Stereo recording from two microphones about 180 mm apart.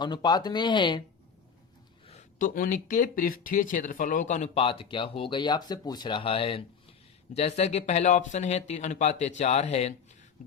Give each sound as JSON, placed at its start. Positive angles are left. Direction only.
{"t": 0.0, "sound": "speech", "side_deg": 25}
{"t": 2.0, "sound": "a sound", "side_deg": 35}
{"t": 2.6, "sound": "speech", "side_deg": 45}